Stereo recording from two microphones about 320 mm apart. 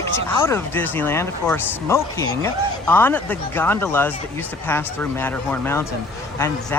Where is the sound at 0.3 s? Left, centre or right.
Centre.